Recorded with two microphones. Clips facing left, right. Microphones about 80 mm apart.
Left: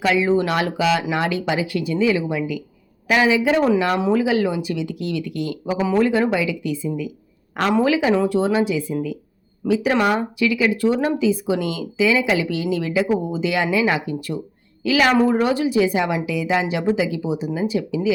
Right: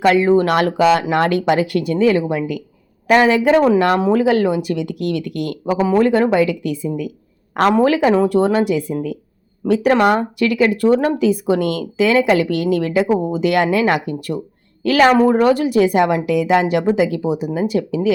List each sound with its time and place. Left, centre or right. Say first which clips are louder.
0.0 s a woman's voice: right 5 dB; right
6.0 s a woman's voice: right 4 dB; right